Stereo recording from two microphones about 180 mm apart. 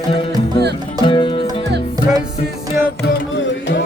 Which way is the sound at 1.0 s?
25° left (ahead or behind).